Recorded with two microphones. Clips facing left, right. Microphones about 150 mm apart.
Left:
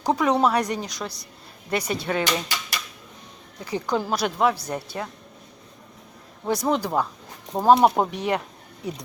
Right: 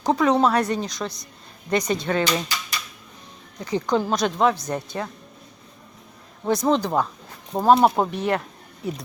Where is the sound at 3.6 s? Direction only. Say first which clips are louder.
Right 3 dB; 10° left (ahead or behind).